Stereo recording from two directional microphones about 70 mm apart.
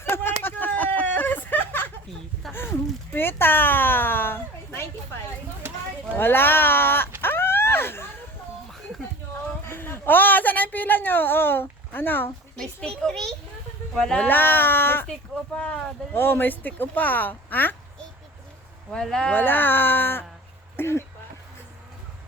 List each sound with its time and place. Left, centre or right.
0.0 s a sound: left
6.1 s sheep: left
7.2 s a sound: left
9.6 s a sound: left
12.5 s a child's voice: centre
14.3 s speech: left
15.5 s speech: centre
16.1 s speech: left
19.0 s speech: centre
19.3 s speech: left